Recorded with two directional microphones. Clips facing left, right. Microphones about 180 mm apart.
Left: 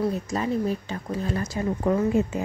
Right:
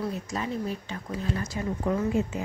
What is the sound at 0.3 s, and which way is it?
Speech, 40° left (ahead or behind).